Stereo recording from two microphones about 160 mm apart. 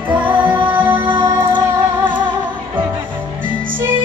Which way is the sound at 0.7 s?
10° right (ahead or behind).